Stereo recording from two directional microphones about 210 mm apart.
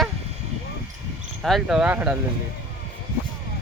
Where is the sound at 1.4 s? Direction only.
Centre (ahead or behind).